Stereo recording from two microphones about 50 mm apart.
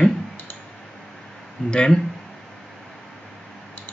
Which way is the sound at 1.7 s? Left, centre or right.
Centre.